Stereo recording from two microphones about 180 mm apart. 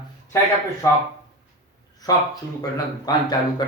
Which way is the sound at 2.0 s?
20° left (ahead or behind).